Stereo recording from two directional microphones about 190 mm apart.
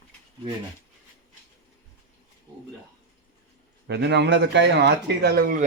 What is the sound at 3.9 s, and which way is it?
A man's voice, 65° right (ahead or behind).